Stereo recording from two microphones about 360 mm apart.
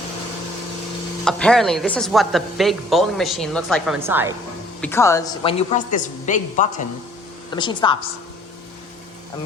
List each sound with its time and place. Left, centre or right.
1.2 s speech: centre
4.8 s a woman's voice: centre